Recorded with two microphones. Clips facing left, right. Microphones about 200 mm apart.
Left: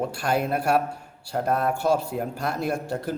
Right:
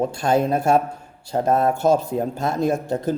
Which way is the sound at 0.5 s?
25° right (ahead or behind).